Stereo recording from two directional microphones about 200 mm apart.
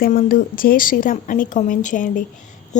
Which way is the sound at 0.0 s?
45° left (ahead or behind).